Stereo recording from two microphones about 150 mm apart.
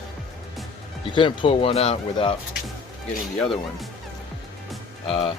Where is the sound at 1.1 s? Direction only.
35° left (ahead or behind).